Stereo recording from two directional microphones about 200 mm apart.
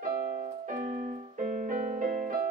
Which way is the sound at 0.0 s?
40° right (ahead or behind).